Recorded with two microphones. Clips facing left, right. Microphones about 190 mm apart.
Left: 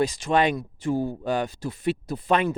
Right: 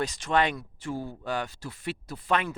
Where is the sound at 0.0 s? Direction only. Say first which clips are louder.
Left 4 dB; 10° left (ahead or behind).